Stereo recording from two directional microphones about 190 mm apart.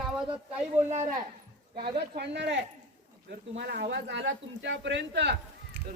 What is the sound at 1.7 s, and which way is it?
Speech, 55° right (ahead or behind).